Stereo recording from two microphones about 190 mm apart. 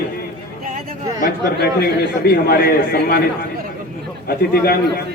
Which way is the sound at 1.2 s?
55° left (ahead or behind).